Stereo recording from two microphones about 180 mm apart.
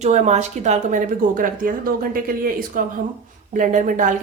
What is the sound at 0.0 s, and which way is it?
Speech, 40° right (ahead or behind).